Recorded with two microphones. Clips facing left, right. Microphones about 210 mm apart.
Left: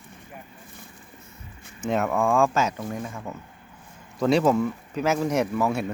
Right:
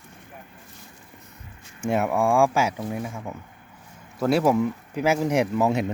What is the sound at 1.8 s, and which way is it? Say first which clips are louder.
Speech: right 1 dB; 10° right (ahead or behind).